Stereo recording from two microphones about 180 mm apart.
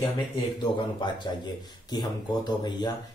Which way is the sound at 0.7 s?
25° left (ahead or behind).